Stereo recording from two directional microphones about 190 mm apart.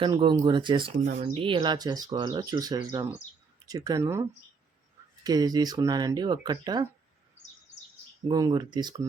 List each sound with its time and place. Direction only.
0.0 s speech: 25° right (ahead or behind)
8.3 s speech: 20° right (ahead or behind)